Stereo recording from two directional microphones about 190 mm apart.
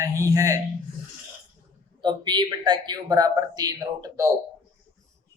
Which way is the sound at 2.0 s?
25° right (ahead or behind).